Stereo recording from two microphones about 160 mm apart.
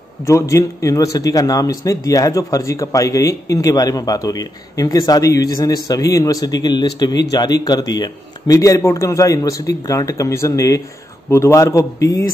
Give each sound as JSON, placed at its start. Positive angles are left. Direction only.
{"t": 0.2, "sound": "a man's voice", "side_deg": 20}